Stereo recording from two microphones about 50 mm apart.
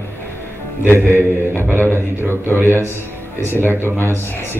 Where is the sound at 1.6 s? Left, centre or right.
Right.